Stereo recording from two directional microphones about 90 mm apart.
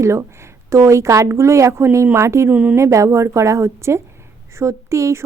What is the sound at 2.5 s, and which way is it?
Speech, 15° right (ahead or behind).